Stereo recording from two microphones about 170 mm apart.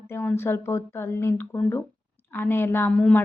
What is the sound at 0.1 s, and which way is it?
A woman's voice, 10° left (ahead or behind).